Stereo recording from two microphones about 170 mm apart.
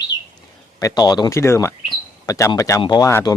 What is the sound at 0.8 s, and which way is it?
Speech, 20° left (ahead or behind).